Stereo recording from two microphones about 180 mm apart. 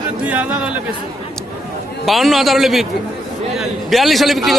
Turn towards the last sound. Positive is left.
turn(degrees=0)  # may be behind; listen again after turning